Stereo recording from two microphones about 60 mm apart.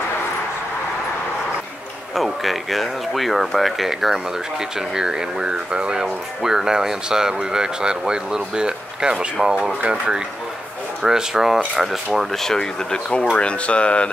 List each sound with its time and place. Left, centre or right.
2.1 s speech: centre